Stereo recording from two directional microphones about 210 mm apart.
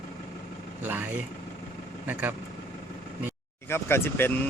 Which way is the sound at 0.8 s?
10° right (ahead or behind).